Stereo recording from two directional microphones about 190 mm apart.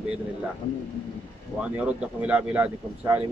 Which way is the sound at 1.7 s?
5° right (ahead or behind).